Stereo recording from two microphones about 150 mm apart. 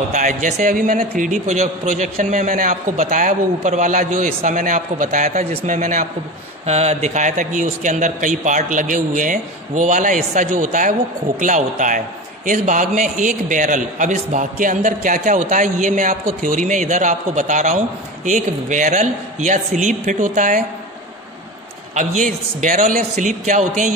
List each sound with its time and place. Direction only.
0.1 s a man's voice: 55° right (ahead or behind)
5.4 s speech: 40° right (ahead or behind)
5.7 s a man's voice: 60° right (ahead or behind)
6.6 s a man's voice: 45° right (ahead or behind); by 20.6 s 60° right (ahead or behind)
21.9 s a man's voice: 55° right (ahead or behind)